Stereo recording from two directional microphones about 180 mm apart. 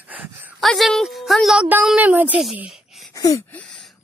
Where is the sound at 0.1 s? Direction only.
10° right (ahead or behind).